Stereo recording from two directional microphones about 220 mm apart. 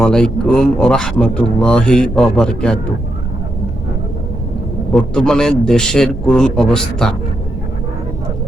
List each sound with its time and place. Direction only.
0.0 s speech: 5° left (ahead or behind)
4.9 s speech: 5° left (ahead or behind)